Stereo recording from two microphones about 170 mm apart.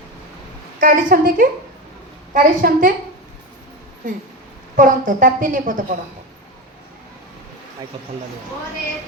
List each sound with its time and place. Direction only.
0.8 s a woman's voice: 50° right (ahead or behind)
4.8 s a woman's voice: 50° right (ahead or behind)